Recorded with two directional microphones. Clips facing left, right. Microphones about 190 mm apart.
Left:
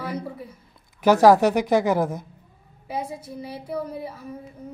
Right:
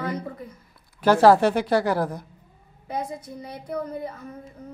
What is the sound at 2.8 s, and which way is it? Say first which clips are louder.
A woman's voice: even; 5° left (ahead or behind).